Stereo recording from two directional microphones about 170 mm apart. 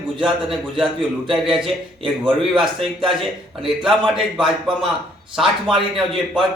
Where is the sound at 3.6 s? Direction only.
5° right (ahead or behind).